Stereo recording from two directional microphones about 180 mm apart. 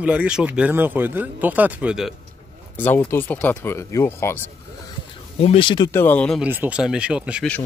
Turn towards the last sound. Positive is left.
turn(degrees=-5)  # may be behind; listen again after turning